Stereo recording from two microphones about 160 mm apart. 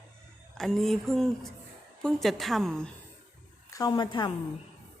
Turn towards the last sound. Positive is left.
turn(degrees=30)  # may be behind; listen again after turning